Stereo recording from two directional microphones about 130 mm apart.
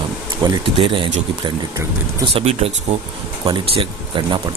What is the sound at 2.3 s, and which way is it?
Speech, 50° right (ahead or behind).